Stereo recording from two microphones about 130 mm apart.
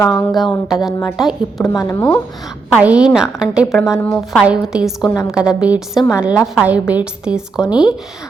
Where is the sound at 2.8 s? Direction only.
10° right (ahead or behind).